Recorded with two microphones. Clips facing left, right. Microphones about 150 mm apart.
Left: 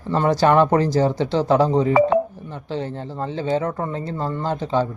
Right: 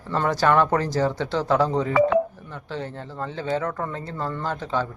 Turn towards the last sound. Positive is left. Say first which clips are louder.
# left 5 dB
turn(degrees=25)  # may be behind; listen again after turning